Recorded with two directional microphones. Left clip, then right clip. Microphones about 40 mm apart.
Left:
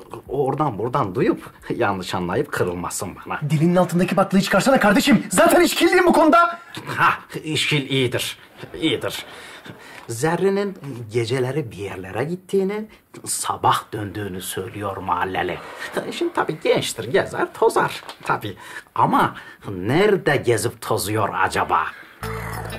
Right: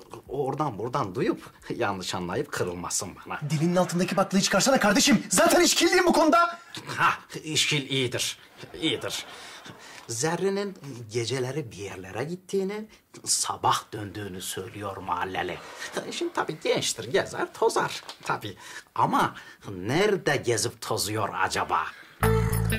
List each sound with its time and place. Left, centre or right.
0.5 s speech: right
3.4 s speech: right
10.2 s speech: right
18.9 s speech: centre
20.3 s speech: right
21.2 s speech: centre
22.3 s music: right